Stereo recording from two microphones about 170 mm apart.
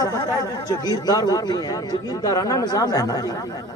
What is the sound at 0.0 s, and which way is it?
A man's voice, 20° left (ahead or behind).